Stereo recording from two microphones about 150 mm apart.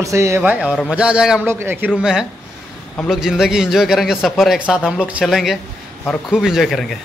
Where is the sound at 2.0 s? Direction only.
5° right (ahead or behind).